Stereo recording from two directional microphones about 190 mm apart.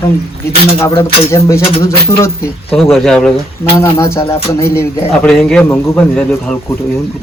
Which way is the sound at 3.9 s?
15° left (ahead or behind).